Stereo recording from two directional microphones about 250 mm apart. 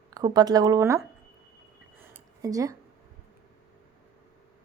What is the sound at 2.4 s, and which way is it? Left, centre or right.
Speech, centre.